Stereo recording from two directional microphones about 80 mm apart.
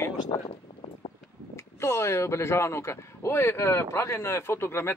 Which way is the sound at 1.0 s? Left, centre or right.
Left.